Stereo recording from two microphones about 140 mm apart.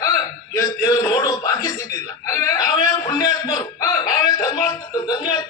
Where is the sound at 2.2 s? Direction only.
20° left (ahead or behind).